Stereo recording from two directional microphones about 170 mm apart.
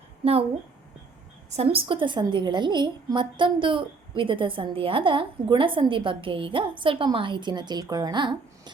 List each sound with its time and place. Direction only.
1.5 s a woman's voice: 35° right (ahead or behind)